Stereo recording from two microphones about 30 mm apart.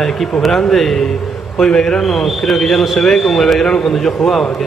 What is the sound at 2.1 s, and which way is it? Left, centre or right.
A man's voice, centre.